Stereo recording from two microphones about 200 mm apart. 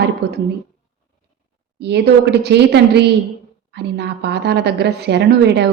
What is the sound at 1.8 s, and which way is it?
A woman's voice, 55° right (ahead or behind).